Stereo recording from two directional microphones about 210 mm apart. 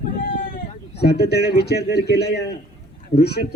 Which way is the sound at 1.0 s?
50° left (ahead or behind).